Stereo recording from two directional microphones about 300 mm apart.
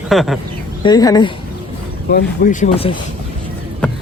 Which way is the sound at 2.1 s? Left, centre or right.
Left.